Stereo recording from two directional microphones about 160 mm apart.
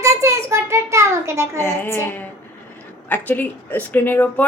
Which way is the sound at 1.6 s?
15° left (ahead or behind).